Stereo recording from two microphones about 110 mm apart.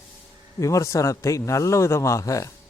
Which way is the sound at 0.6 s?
30° left (ahead or behind).